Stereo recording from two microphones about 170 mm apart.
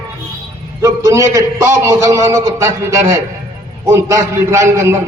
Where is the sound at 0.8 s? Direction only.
20° right (ahead or behind).